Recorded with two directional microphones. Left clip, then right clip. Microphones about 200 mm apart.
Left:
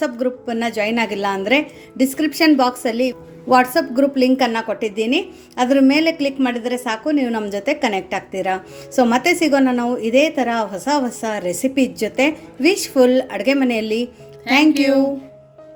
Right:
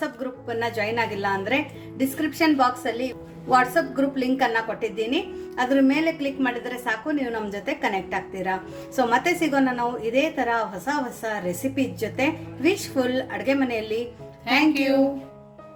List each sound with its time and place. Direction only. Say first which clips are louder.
0.0 s a woman's voice: left 9 dB; 40° left (ahead or behind)